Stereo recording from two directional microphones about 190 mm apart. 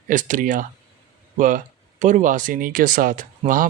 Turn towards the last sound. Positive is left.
turn(degrees=-45)  # may be behind; listen again after turning